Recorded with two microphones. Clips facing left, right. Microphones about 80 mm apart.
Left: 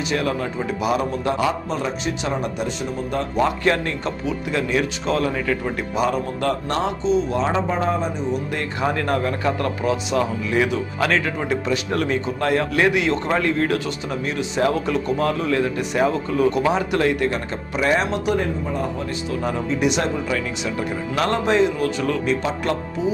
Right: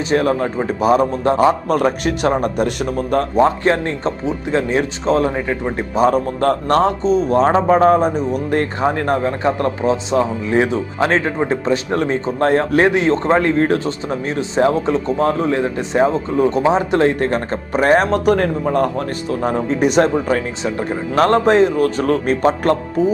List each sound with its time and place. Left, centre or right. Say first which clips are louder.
0.1 s speech: right 8 dB; right
1.6 s speech: right 8 dB; right
3.4 s speech: right 1 dB; right
8.8 s speech: even; right
19.3 s speech: right 6 dB; right